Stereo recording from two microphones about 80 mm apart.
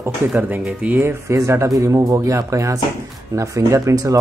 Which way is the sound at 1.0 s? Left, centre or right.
Right.